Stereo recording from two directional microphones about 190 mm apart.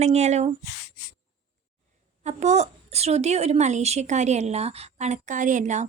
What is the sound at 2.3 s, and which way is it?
A woman's voice, 35° right (ahead or behind).